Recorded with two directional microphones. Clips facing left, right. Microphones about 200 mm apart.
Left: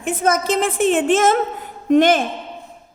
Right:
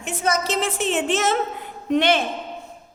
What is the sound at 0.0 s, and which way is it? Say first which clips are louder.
A woman's voice: left 5 dB; 50° left (ahead or behind).